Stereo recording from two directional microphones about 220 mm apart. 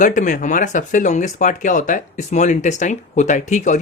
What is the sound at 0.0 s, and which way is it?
Speech, 35° left (ahead or behind).